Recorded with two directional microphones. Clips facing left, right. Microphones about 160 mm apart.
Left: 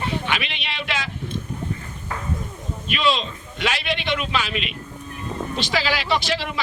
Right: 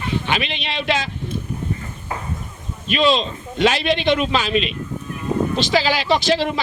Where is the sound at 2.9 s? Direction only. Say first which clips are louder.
Right 5 dB; 30° right (ahead or behind).